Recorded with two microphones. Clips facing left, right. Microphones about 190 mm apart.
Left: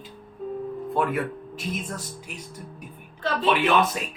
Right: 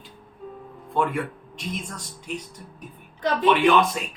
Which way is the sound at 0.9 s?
5° left (ahead or behind).